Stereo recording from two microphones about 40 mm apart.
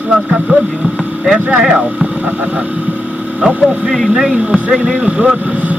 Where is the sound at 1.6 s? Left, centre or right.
Centre.